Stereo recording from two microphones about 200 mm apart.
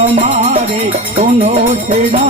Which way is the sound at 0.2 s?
35° right (ahead or behind).